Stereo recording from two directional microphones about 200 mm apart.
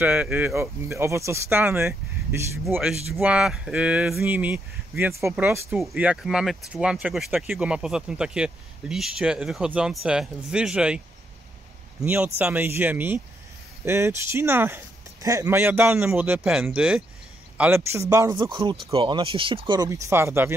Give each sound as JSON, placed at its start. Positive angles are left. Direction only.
{"t": 0.0, "sound": "speech", "side_deg": -10}
{"t": 12.0, "sound": "speech", "side_deg": -10}